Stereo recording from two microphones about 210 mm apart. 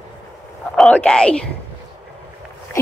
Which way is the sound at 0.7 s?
5° left (ahead or behind).